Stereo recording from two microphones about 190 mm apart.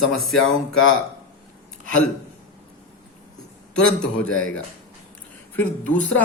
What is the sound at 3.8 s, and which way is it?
Speech, 5° left (ahead or behind).